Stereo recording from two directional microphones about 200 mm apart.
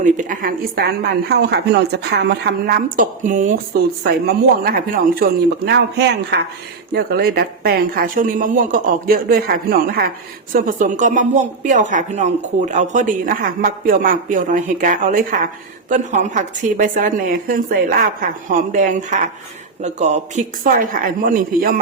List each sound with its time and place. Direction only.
0.0 s speech: 40° right (ahead or behind)